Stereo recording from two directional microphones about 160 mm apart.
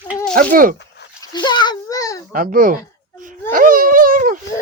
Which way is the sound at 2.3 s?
60° right (ahead or behind).